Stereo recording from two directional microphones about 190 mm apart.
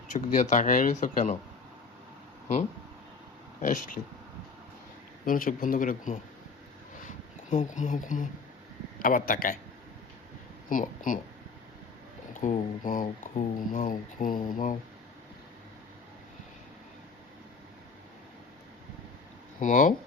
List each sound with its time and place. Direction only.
0.1 s speech: 40° left (ahead or behind)
3.6 s speech: 45° left (ahead or behind)
5.2 s speech: 45° left (ahead or behind)
7.5 s speech: 40° left (ahead or behind)
10.7 s speech: 45° left (ahead or behind)
12.4 s speech: 45° left (ahead or behind)
19.5 s speech: 40° left (ahead or behind)